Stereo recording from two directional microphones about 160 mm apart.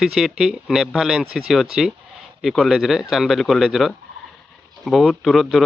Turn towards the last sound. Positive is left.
turn(degrees=0)  # may be behind; listen again after turning